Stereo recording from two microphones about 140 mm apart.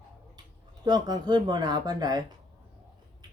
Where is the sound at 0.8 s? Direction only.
30° right (ahead or behind).